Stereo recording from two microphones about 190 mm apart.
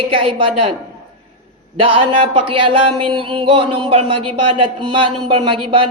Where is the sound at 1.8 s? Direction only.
30° right (ahead or behind).